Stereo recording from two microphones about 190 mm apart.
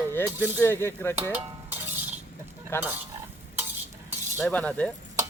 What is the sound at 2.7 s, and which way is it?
Speech, 10° left (ahead or behind).